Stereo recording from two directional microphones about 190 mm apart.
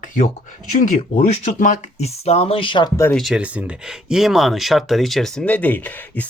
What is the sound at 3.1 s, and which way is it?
Speech, centre (ahead or behind).